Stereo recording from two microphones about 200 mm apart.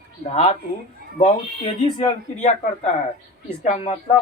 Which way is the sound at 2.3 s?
35° left (ahead or behind).